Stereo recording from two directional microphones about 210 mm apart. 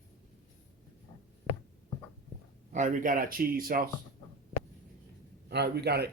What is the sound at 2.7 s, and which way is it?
Speech, 35° right (ahead or behind).